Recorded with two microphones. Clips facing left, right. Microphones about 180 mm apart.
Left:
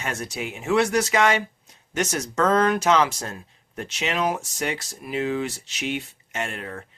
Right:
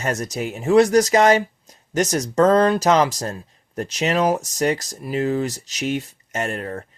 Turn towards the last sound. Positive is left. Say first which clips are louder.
# right 5 dB
turn(degrees=-40)  # may be behind; listen again after turning